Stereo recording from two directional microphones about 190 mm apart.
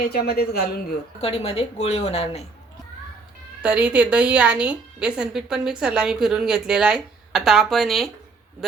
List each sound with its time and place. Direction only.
0.0 s speech: 55° left (ahead or behind)
1.2 s a woman's voice: 30° left (ahead or behind)
3.6 s a woman's voice: 5° right (ahead or behind)